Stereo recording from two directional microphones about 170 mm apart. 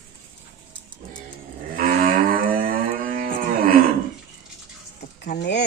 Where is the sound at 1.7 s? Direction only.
55° right (ahead or behind).